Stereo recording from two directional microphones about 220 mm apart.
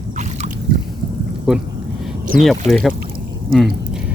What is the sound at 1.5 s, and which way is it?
Speech, 5° right (ahead or behind).